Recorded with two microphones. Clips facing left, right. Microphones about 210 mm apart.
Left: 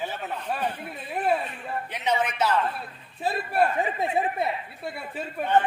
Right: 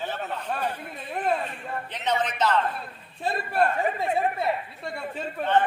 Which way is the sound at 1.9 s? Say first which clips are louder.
Left 1 dB; 10° left (ahead or behind).